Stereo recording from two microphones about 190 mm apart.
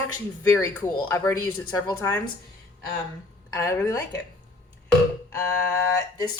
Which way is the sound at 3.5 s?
15° left (ahead or behind).